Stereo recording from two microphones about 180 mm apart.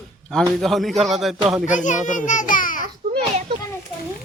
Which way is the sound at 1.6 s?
45° left (ahead or behind).